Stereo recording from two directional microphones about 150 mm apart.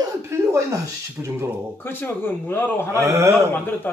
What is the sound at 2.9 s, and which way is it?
Speech, 15° right (ahead or behind).